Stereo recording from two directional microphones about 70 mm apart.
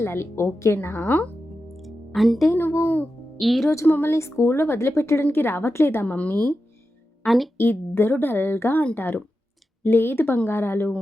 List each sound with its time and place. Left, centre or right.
0.0 s a woman's voice: left
1.7 s music: centre
2.5 s speech: left
3.3 s a woman's voice: centre
3.8 s speech: left
4.1 s a woman's voice: left
6.1 s speech: left
7.3 s a woman's voice: centre
7.5 s a woman's voice: left